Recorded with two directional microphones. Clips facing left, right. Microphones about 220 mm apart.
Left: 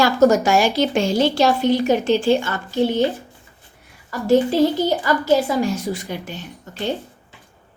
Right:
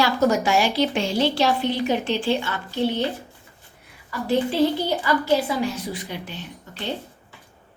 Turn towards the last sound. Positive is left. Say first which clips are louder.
# left 5 dB
turn(degrees=45)  # may be behind; listen again after turning